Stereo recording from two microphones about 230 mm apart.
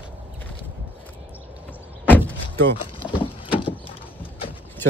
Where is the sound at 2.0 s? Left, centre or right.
Centre.